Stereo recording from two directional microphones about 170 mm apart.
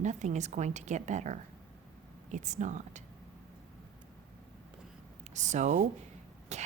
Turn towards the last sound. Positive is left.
turn(degrees=-40)  # may be behind; listen again after turning